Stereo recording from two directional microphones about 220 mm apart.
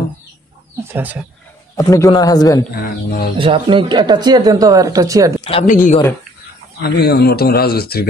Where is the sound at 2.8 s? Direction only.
40° left (ahead or behind).